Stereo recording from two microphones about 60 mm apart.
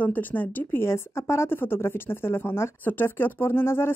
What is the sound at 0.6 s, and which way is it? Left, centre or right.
A woman's voice, left.